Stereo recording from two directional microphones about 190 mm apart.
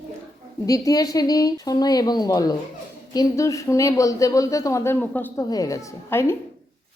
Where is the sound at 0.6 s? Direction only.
20° left (ahead or behind).